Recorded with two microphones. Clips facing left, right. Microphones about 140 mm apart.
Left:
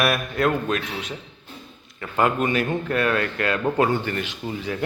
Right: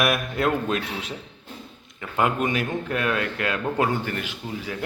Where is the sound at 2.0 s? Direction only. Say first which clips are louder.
Left 2 dB; 10° right (ahead or behind).